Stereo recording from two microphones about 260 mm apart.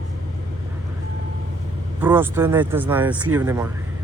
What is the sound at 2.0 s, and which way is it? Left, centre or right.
Speech, centre.